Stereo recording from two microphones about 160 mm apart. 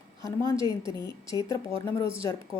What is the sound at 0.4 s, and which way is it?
Speech, 30° right (ahead or behind).